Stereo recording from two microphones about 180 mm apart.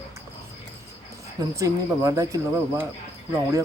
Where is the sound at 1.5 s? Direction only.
20° right (ahead or behind).